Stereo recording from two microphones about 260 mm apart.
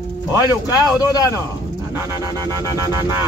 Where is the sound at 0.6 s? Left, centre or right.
Centre.